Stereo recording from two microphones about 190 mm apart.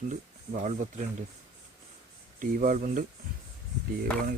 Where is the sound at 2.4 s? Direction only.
45° right (ahead or behind).